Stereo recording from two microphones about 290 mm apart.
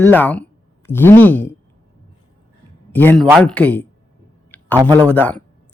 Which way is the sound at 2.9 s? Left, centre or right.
Centre.